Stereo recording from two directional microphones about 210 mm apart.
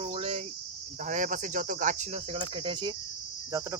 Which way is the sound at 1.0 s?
40° right (ahead or behind).